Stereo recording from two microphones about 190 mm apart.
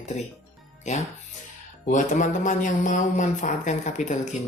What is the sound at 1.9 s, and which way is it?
A woman's voice, 40° left (ahead or behind).